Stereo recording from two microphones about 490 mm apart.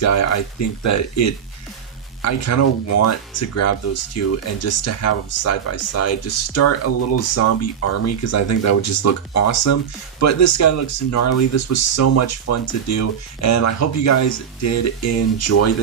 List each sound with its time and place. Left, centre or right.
0.0 s speech: left